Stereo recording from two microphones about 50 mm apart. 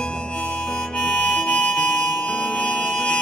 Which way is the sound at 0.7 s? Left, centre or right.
Centre.